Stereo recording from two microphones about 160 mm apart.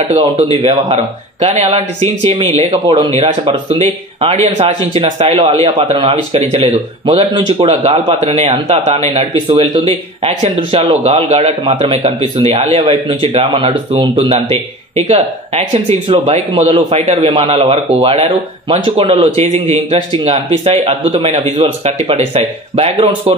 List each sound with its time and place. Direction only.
0.1 s speech: 35° right (ahead or behind)
0.6 s speech: 25° right (ahead or behind)
0.9 s speech: 45° right (ahead or behind)
2.7 s a man's voice: 30° right (ahead or behind)